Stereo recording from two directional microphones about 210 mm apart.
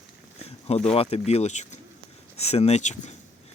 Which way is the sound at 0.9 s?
30° left (ahead or behind).